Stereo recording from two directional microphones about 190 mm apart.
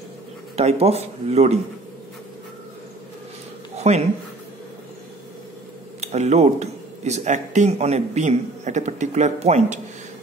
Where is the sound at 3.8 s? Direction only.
35° right (ahead or behind).